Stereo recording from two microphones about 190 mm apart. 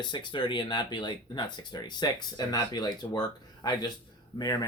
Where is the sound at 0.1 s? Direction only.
25° left (ahead or behind).